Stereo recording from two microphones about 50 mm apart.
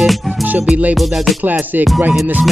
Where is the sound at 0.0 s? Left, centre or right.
Centre.